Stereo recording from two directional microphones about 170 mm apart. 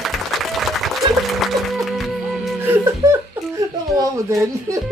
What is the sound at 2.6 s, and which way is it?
Laughter, 15° right (ahead or behind).